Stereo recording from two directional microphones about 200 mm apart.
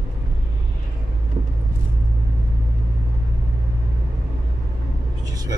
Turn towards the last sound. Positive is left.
turn(degrees=-20)  # may be behind; listen again after turning